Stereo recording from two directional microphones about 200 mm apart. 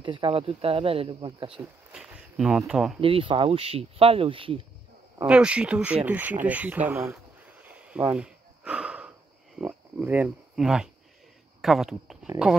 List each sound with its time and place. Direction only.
0.0 s speech: 25° right (ahead or behind)
1.9 s speech: 5° right (ahead or behind)
3.0 s speech: 25° right (ahead or behind)
5.2 s speech: 5° right (ahead or behind)
6.0 s a sound: 10° right (ahead or behind)
9.6 s speech: 10° right (ahead or behind)